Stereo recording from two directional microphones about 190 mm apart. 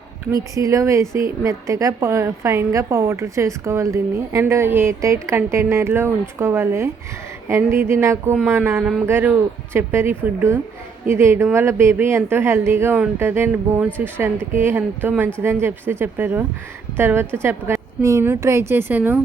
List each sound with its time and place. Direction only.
0.5 s a woman's voice: 15° right (ahead or behind)